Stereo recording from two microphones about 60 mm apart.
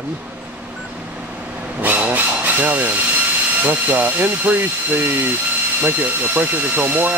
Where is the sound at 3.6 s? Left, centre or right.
Right.